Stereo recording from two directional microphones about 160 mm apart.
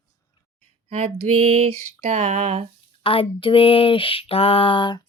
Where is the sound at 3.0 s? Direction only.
35° left (ahead or behind).